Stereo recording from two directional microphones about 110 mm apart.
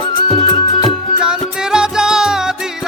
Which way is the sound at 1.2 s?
5° right (ahead or behind).